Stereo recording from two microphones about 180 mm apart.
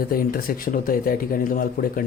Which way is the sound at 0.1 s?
55° left (ahead or behind).